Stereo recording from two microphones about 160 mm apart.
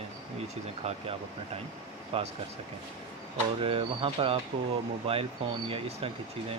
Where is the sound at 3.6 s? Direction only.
35° right (ahead or behind).